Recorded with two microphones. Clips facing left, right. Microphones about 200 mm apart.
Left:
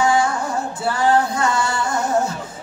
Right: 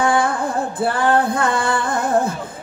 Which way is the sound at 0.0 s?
55° right (ahead or behind).